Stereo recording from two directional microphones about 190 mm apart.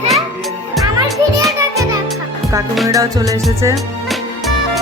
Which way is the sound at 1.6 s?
15° right (ahead or behind).